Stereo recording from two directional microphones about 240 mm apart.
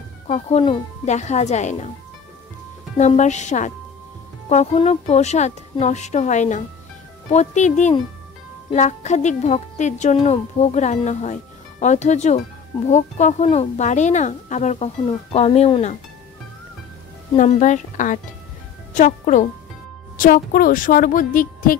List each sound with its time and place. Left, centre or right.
0.3 s speech: left
3.0 s speech: left
17.4 s a woman's voice: left